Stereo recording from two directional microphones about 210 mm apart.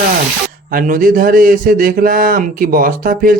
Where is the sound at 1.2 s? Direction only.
40° right (ahead or behind).